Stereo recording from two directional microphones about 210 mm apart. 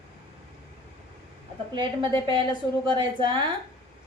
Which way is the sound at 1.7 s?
20° right (ahead or behind).